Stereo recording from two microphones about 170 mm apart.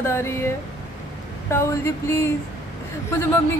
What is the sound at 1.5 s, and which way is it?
Speech, 15° left (ahead or behind).